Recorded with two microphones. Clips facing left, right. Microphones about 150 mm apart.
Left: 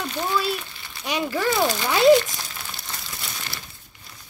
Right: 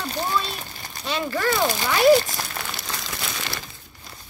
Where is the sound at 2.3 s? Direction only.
80° right.